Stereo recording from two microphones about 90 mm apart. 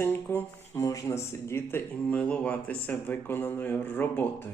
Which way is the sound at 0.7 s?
40° left (ahead or behind).